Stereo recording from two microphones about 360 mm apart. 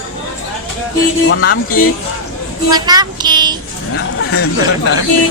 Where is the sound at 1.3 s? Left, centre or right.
Left.